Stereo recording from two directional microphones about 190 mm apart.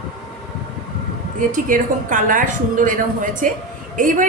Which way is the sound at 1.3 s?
45° right (ahead or behind).